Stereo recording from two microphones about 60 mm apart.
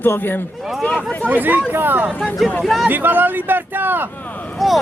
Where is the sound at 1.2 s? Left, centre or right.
Right.